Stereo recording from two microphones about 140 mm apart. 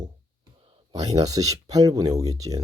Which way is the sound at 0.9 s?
25° right (ahead or behind).